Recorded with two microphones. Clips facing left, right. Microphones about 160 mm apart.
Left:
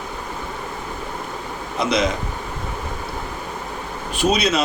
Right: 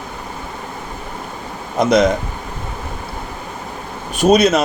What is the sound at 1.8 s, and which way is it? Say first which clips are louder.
Speech: right 7 dB; 45° right (ahead or behind).